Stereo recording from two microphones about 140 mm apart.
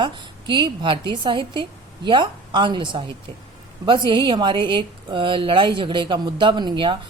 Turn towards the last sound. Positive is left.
turn(degrees=-35)  # may be behind; listen again after turning